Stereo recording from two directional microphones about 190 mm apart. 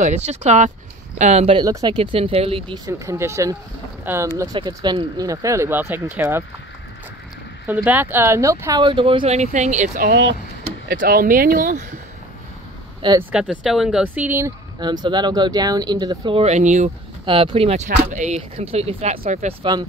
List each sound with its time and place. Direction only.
0.0 s speech: 35° right (ahead or behind)
1.6 s speech: 20° right (ahead or behind)
2.9 s speech: 15° right (ahead or behind)
7.6 s speech: 10° right (ahead or behind); by 10.0 s 40° right (ahead or behind)
10.0 s speech: 65° right (ahead or behind)
10.9 s speech: 50° right (ahead or behind)
13.3 s speech: 5° right (ahead or behind)
14.8 s speech: 25° right (ahead or behind); by 16.9 s 40° right (ahead or behind)
17.2 s speech: 25° right (ahead or behind)